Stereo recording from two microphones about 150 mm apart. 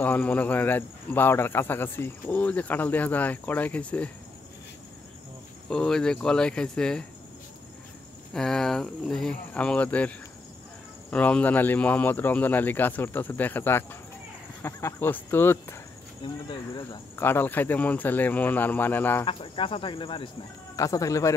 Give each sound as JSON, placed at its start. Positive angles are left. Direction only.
{"t": 0.0, "sound": "speech", "side_deg": 10}
{"t": 5.7, "sound": "speech", "side_deg": 5}
{"t": 8.3, "sound": "speech", "side_deg": 5}
{"t": 16.4, "sound": "speech", "side_deg": 30}
{"t": 17.1, "sound": "speech", "side_deg": 15}
{"t": 19.2, "sound": "speech", "side_deg": 35}
{"t": 20.7, "sound": "speech", "side_deg": 20}